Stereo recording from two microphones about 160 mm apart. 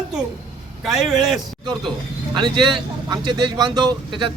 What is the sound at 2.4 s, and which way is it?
Speech, 30° right (ahead or behind).